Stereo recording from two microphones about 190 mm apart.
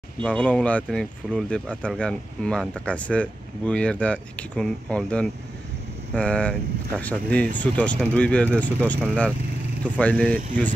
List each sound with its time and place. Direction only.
0.2 s speech: 5° left (ahead or behind)